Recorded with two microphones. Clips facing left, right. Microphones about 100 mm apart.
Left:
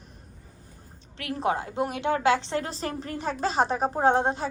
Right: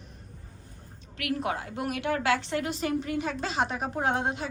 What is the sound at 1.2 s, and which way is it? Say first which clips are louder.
A woman's voice: left 3 dB; 30° left (ahead or behind).